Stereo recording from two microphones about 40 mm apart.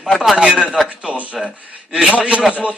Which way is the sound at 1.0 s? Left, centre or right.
Right.